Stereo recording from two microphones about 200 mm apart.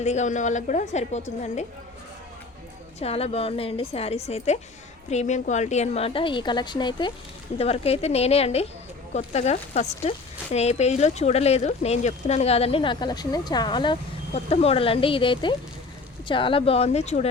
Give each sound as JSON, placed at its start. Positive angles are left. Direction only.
{"t": 0.0, "sound": "speech", "side_deg": 35}
{"t": 3.0, "sound": "a woman's voice", "side_deg": 30}